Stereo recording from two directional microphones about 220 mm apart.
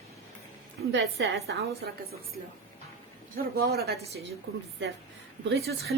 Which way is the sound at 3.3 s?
45° right (ahead or behind).